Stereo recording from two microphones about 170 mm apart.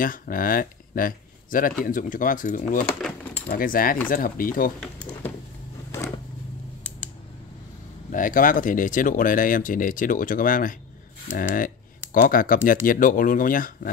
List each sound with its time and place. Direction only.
0.0 s speech: 55° left (ahead or behind)
3.0 s a sound: 5° left (ahead or behind)
3.5 s speech: 55° left (ahead or behind)
8.1 s speech: 50° left (ahead or behind)